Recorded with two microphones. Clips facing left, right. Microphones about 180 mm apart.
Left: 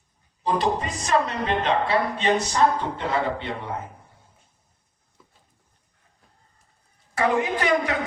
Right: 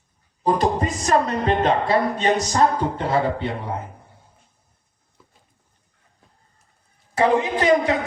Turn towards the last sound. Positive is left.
turn(degrees=-25)  # may be behind; listen again after turning